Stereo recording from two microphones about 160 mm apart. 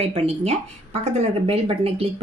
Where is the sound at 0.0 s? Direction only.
40° right (ahead or behind).